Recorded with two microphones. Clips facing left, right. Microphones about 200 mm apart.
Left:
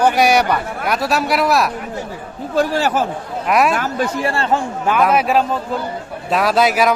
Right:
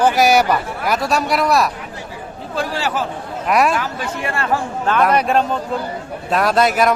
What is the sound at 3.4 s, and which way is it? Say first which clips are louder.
Speech: even; centre (ahead or behind).